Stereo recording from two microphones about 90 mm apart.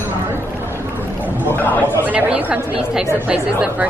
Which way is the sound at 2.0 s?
15° right (ahead or behind).